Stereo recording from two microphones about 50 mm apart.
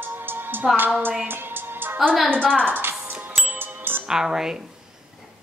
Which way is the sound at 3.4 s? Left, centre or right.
Right.